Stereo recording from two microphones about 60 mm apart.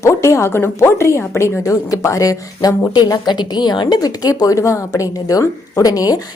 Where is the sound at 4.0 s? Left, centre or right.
Left.